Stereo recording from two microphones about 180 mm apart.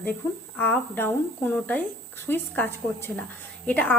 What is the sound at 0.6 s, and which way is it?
A woman's voice, 10° left (ahead or behind).